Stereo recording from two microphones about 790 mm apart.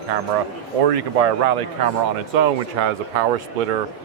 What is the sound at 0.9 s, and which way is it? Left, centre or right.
Speech, right.